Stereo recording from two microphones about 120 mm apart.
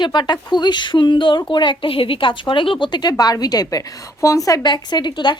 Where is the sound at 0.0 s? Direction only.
40° left (ahead or behind).